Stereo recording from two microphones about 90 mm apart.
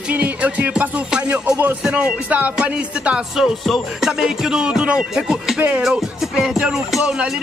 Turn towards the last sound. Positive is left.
turn(degrees=-10)  # may be behind; listen again after turning